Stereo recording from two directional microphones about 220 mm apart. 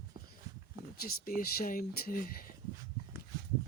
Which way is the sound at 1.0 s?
40° left (ahead or behind).